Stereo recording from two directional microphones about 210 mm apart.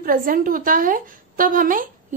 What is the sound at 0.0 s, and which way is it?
A woman's voice, 40° right (ahead or behind).